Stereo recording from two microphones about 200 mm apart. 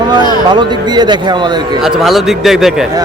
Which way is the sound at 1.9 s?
Centre (ahead or behind).